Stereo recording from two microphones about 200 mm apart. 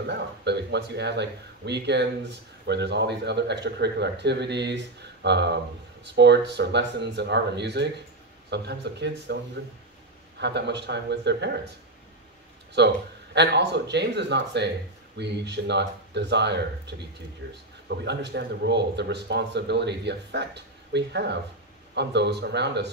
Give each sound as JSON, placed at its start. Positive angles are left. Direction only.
{"t": 0.0, "sound": "speech", "side_deg": -55}
{"t": 10.4, "sound": "speech", "side_deg": -60}
{"t": 12.7, "sound": "speech", "side_deg": -60}